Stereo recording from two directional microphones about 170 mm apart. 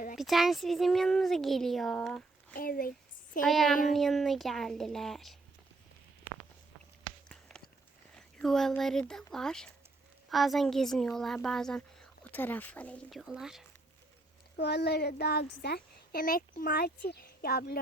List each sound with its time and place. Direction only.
0.2 s a woman's voice: centre (ahead or behind)
2.6 s a woman's voice: 60° left (ahead or behind)
3.4 s a woman's voice: centre (ahead or behind)
7.3 s a sound: 5° left (ahead or behind)
8.4 s a woman's voice: centre (ahead or behind)
14.5 s a woman's voice: 70° left (ahead or behind)